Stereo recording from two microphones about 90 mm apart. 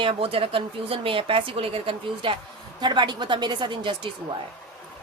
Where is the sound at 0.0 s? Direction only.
90° right.